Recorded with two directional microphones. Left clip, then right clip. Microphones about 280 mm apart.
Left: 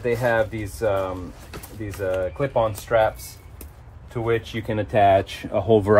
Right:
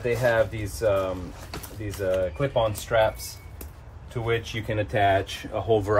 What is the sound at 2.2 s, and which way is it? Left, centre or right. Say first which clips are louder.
Speech: left 4 dB; centre.